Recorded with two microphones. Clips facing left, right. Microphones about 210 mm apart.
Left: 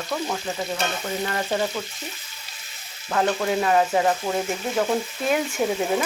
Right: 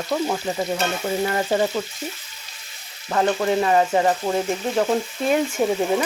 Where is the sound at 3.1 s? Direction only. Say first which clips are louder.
Right 2 dB; 10° right (ahead or behind).